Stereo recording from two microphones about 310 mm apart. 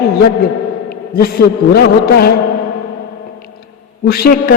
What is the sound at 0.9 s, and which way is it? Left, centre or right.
A man's voice, left.